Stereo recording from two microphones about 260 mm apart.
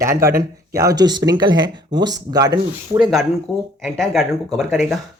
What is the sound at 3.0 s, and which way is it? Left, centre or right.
Speech, centre.